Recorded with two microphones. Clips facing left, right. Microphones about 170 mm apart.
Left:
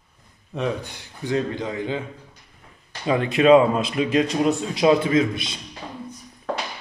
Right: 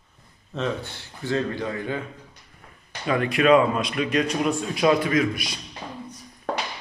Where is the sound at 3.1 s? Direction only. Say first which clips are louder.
Left 3 dB; 25° left (ahead or behind).